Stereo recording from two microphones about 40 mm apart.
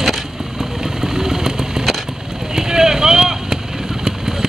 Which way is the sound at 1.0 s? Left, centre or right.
Centre.